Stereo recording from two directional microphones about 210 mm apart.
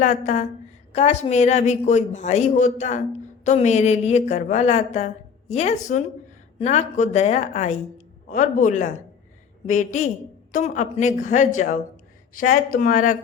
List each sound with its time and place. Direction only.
0.0 s a woman's voice: 35° left (ahead or behind)